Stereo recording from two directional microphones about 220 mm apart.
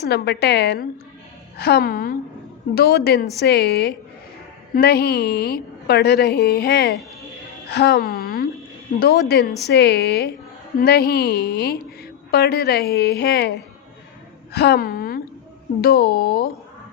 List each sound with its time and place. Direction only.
0.0 s a woman's voice: 50° left (ahead or behind)
14.5 s a woman's voice: 45° left (ahead or behind)